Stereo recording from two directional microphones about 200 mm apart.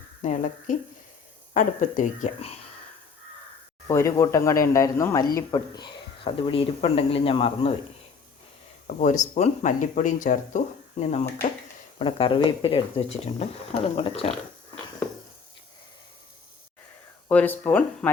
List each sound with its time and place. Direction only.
0.2 s speech: 40° left (ahead or behind)
3.8 s speech: 15° left (ahead or behind)
9.0 s speech: 40° left (ahead or behind)
17.2 s speech: 10° left (ahead or behind)